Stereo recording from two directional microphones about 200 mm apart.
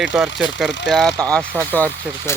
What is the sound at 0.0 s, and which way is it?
Speech, centre (ahead or behind).